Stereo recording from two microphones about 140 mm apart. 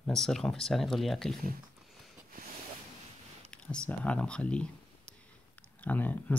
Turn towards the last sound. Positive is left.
turn(degrees=10)  # may be behind; listen again after turning